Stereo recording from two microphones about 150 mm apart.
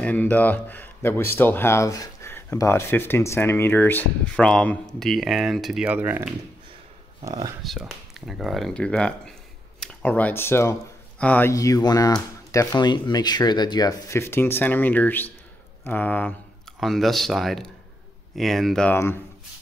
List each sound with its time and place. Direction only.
0.0 s speech: 10° left (ahead or behind); by 6.3 s 15° right (ahead or behind)
7.6 s speech: centre (ahead or behind)
11.5 s speech: 25° left (ahead or behind); by 18.9 s 5° left (ahead or behind)